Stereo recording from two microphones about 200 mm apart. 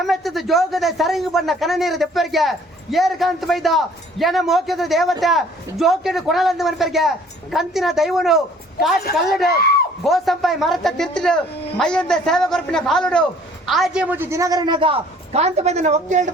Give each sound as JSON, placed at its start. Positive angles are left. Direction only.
{"t": 0.0, "sound": "a man's voice", "side_deg": 0}
{"t": 9.4, "sound": "speech", "side_deg": 50}
{"t": 10.0, "sound": "a man's voice", "side_deg": 0}